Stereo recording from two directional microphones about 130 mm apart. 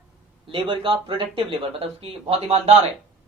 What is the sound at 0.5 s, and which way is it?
Speech, 40° right (ahead or behind).